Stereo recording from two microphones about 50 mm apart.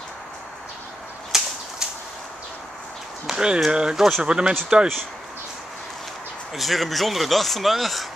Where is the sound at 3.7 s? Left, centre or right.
Centre.